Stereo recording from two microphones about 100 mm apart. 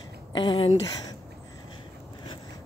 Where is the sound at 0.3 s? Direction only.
55° left (ahead or behind).